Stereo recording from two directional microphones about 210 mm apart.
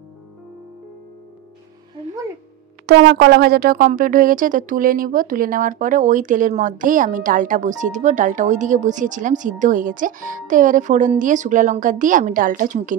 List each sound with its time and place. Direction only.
2.9 s speech: 55° right (ahead or behind); by 12.9 s 35° right (ahead or behind)